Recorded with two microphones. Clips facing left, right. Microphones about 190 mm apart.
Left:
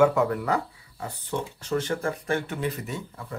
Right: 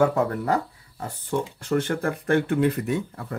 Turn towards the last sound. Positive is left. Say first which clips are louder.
# right 7 dB
turn(degrees=-55)  # may be behind; listen again after turning